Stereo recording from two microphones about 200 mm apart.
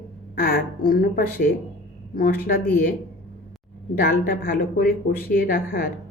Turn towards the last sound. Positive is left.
turn(degrees=45)  # may be behind; listen again after turning